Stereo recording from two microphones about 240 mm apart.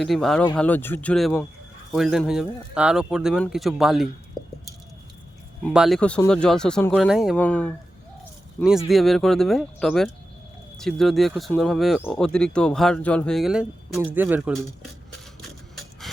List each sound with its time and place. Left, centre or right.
0.0 s speech: centre
5.6 s speech: centre
8.9 s speech: centre
15.4 s rub: centre